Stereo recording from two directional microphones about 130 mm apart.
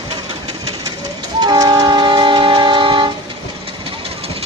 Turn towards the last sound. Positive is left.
turn(degrees=-35)  # may be behind; listen again after turning